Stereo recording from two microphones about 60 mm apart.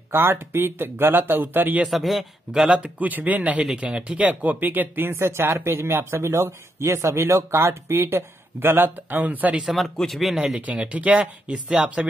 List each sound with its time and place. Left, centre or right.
0.1 s speech: right
1.9 s a man's voice: centre
3.0 s speech: right
9.8 s a man's voice: centre
10.8 s speech: right